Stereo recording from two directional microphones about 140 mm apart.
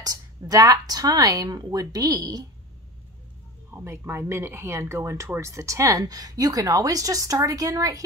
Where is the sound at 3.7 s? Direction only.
20° right (ahead or behind).